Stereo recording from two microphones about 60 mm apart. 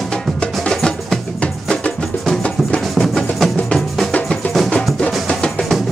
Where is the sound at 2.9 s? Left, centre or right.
Centre.